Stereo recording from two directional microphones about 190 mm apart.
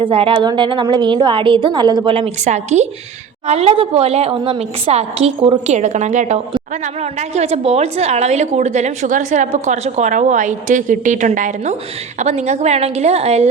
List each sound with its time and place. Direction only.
0.0 s a woman's voice: 30° right (ahead or behind)